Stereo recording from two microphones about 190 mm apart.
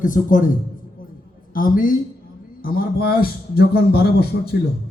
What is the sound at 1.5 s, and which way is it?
A man's voice, 45° left (ahead or behind).